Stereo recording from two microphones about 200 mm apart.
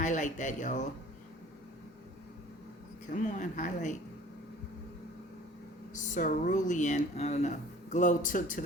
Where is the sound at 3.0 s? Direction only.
40° left (ahead or behind).